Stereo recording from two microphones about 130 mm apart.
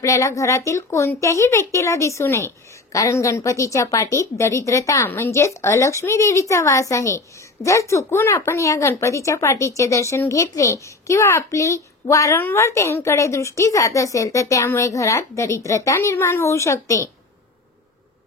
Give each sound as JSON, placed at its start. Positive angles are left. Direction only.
{"t": 0.0, "sound": "speech", "side_deg": 25}